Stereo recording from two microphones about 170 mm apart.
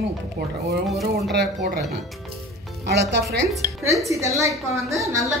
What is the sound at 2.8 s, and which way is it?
Speech, 90° right.